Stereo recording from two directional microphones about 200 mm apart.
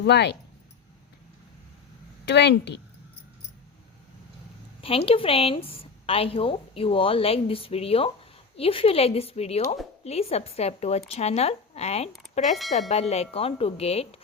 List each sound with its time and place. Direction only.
0.0 s a woman's voice: 60° left (ahead or behind)
2.2 s a woman's voice: 60° left (ahead or behind)
4.8 s a woman's voice: 30° left (ahead or behind)